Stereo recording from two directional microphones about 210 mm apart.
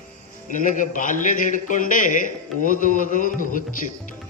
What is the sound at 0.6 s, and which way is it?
A man's voice, 40° left (ahead or behind).